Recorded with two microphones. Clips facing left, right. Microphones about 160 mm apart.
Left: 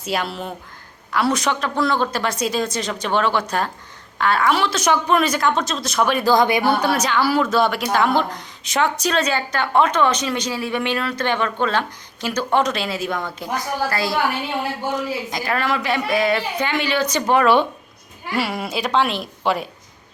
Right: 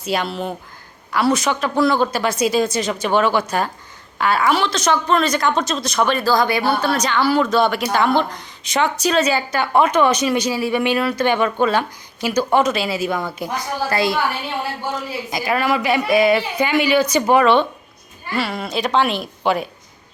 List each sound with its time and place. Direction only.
0.0 s speech: centre (ahead or behind)
6.2 s speech: 20° left (ahead or behind); by 13.5 s 5° right (ahead or behind)
13.9 s a woman's voice: 20° right (ahead or behind)
15.3 s speech: 10° right (ahead or behind)
17.4 s speech: 5° left (ahead or behind)